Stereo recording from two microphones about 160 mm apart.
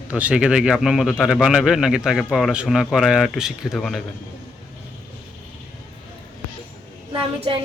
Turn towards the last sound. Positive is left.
turn(degrees=-35)  # may be behind; listen again after turning